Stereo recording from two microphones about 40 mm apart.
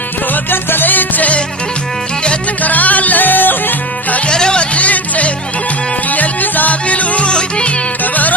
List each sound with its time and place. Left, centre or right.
0.5 s music: left
2.6 s music: left
4.3 s music: left
8.0 s music: left